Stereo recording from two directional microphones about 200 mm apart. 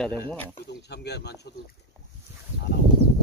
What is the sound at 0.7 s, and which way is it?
Speech, 55° left (ahead or behind).